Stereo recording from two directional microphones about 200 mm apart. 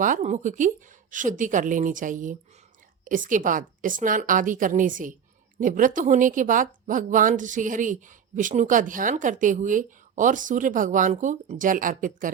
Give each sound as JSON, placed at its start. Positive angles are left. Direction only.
{"t": 0.0, "sound": "a woman's voice", "side_deg": -40}